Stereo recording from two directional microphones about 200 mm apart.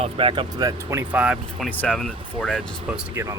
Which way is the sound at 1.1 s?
5° right (ahead or behind).